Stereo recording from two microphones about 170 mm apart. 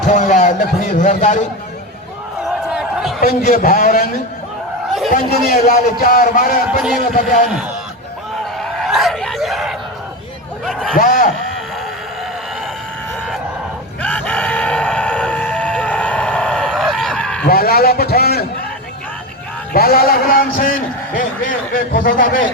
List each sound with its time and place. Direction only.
0.0 s speech: 45° left (ahead or behind)
2.5 s a sound: 5° right (ahead or behind)
3.2 s a man's voice: 60° left (ahead or behind)
5.1 s a man's voice: 55° left (ahead or behind)
6.7 s speech: 5° right (ahead or behind)
7.1 s a man's voice: 50° left (ahead or behind)
8.8 s speech: centre (ahead or behind)
10.9 s a man's voice: 55° left (ahead or behind)
14.0 s fowl: 10° left (ahead or behind)
17.4 s a man's voice: 65° left (ahead or behind)
19.7 s a man's voice: 65° left (ahead or behind)